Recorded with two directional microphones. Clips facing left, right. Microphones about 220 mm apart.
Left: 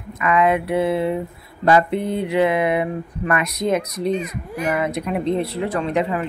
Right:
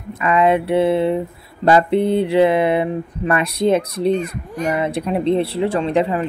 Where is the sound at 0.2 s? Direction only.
30° right (ahead or behind).